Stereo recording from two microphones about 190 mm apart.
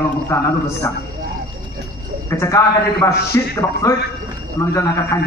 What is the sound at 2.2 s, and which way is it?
A man's voice, 15° left (ahead or behind).